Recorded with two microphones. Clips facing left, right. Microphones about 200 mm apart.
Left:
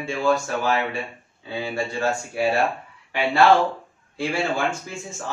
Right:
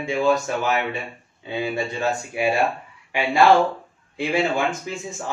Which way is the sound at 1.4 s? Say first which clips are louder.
Right 2 dB; 20° right (ahead or behind).